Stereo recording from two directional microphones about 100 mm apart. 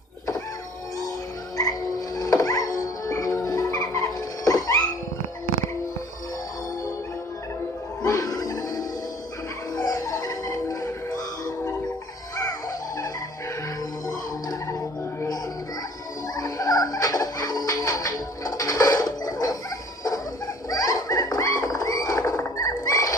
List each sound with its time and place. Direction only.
2.1 s music: 35° left (ahead or behind)
8.0 s music: 35° left (ahead or behind)
16.3 s music: 40° left (ahead or behind)
20.7 s rodents: 35° left (ahead or behind)